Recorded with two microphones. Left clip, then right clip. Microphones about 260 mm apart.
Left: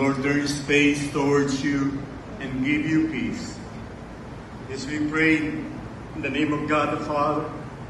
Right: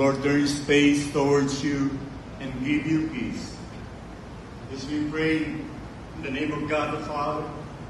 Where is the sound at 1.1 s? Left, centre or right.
Right.